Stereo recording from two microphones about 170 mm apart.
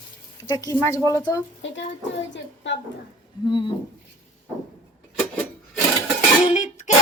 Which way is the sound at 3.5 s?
30° left (ahead or behind).